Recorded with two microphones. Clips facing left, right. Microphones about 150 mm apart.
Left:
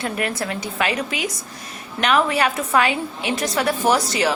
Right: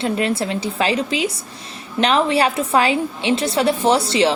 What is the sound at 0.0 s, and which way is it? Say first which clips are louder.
A woman's voice: right 5 dB; 25° right (ahead or behind).